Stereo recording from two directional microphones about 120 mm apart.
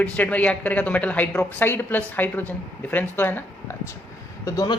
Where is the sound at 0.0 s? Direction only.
15° left (ahead or behind).